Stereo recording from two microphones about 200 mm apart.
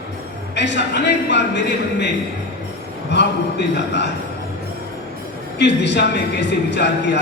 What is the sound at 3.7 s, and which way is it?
Speech, 60° left (ahead or behind).